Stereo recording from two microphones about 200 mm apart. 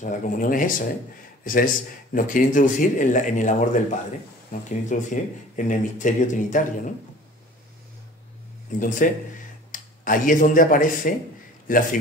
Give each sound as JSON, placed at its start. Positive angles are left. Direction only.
{"t": 0.0, "sound": "speech", "side_deg": 40}
{"t": 8.7, "sound": "a man's voice", "side_deg": 40}